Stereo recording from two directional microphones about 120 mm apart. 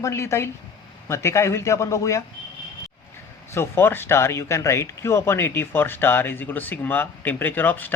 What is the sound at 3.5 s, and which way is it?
Speech, 20° left (ahead or behind).